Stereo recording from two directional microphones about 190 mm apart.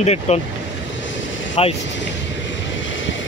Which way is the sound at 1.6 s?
30° left (ahead or behind).